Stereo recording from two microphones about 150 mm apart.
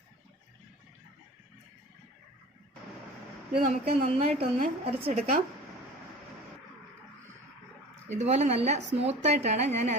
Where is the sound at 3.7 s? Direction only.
50° right (ahead or behind).